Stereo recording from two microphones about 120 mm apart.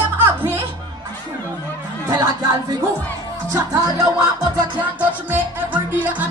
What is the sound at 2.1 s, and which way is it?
Speech, 30° right (ahead or behind).